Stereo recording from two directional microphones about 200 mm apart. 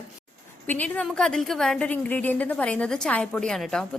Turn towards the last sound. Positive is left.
turn(degrees=0)  # may be behind; listen again after turning